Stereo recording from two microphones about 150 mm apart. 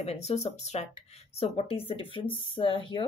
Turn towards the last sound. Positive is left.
turn(degrees=35)  # may be behind; listen again after turning